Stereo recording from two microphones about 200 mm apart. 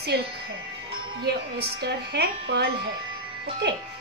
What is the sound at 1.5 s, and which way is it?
A woman's voice, 55° right (ahead or behind).